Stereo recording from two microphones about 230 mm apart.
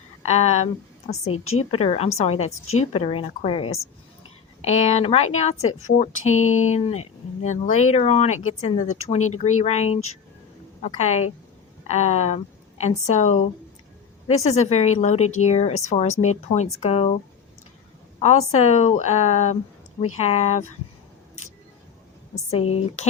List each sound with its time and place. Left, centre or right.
0.2 s speech: left
1.3 s a woman's voice: left
1.7 s a woman's voice: left
18.2 s a woman's voice: left
22.4 s a woman's voice: left